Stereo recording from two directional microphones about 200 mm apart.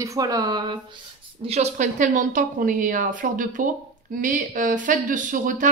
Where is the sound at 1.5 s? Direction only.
35° right (ahead or behind).